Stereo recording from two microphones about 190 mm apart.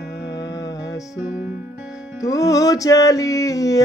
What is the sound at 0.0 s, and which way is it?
Music, 65° left (ahead or behind).